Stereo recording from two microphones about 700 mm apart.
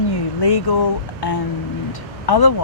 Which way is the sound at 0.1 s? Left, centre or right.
Left.